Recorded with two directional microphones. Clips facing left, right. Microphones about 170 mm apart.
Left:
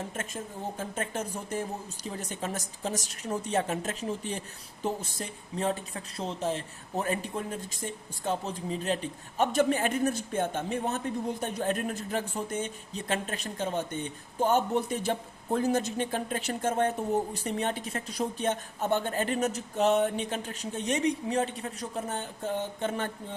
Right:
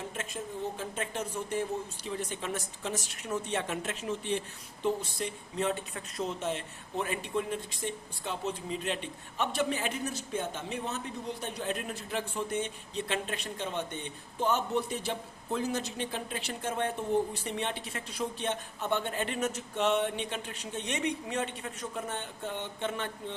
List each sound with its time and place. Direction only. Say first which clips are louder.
0.8 s a woman's voice: left 2 dB; 45° left (ahead or behind)